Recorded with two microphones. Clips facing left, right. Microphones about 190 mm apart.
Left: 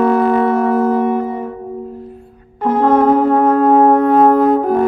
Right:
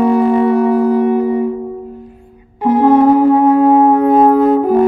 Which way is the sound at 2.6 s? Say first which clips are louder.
Right 3 dB; 10° right (ahead or behind).